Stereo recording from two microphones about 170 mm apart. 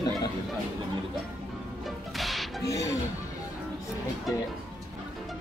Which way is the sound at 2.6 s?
20° left (ahead or behind).